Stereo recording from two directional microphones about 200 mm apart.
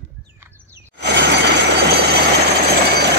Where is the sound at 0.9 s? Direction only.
60° right (ahead or behind).